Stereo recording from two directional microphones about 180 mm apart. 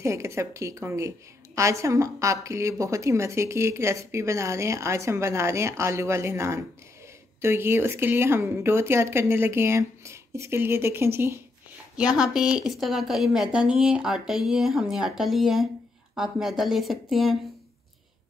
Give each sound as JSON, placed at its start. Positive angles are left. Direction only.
{"t": 0.0, "sound": "a woman's voice", "side_deg": -15}